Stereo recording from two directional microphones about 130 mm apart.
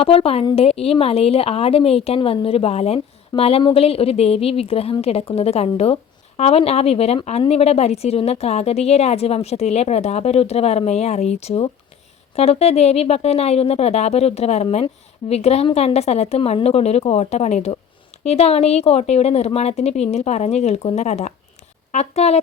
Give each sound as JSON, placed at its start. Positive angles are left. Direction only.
{"t": 0.0, "sound": "a woman's voice", "side_deg": 50}